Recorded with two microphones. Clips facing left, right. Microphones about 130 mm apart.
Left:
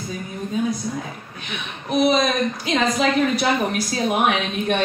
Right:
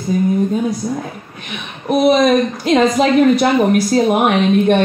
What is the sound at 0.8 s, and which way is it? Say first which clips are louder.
Speech: right 6 dB; 50° right (ahead or behind).